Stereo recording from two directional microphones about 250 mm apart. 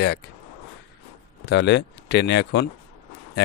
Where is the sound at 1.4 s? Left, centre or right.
Left.